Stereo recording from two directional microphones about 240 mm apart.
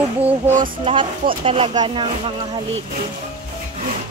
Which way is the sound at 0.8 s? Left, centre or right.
Right.